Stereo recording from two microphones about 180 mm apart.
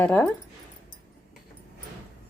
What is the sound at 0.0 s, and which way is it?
Speech, 10° left (ahead or behind).